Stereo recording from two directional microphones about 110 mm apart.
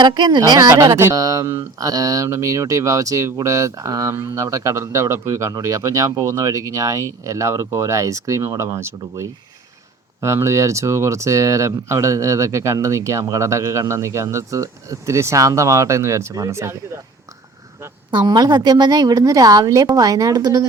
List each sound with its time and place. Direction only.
0.0 s a woman's voice: 40° right (ahead or behind)
0.9 s speech: 20° right (ahead or behind)
18.1 s a woman's voice: 40° right (ahead or behind)